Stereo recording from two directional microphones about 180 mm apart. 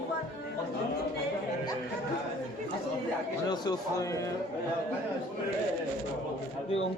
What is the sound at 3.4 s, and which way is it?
Speech, 20° left (ahead or behind).